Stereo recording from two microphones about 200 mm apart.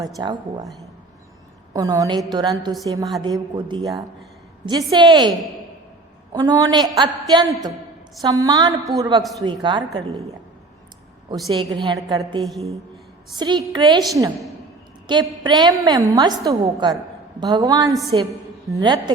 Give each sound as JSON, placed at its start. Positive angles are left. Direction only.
{"t": 0.0, "sound": "a woman's voice", "side_deg": -20}
{"t": 1.7, "sound": "a woman's voice", "side_deg": -20}
{"t": 6.3, "sound": "a woman's voice", "side_deg": -20}
{"t": 11.4, "sound": "a woman's voice", "side_deg": -20}
{"t": 12.4, "sound": "a woman's voice", "side_deg": 0}
{"t": 13.3, "sound": "a woman's voice", "side_deg": -20}
{"t": 15.0, "sound": "a woman's voice", "side_deg": -25}